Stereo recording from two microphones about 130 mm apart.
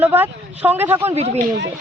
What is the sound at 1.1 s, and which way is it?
Speech, 55° right (ahead or behind).